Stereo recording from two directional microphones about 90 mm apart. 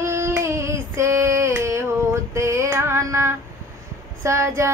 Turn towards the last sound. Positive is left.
turn(degrees=-30)  # may be behind; listen again after turning